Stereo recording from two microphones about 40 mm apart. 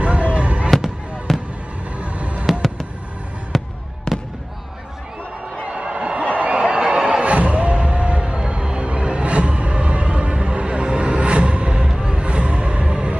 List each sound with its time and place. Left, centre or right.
0.0 s fireworks: right
1.3 s fireworks: centre
2.0 s a sound: right
3.5 s fireworks: centre
4.1 s fireworks: centre
5.7 s a sound: right
6.5 s music: right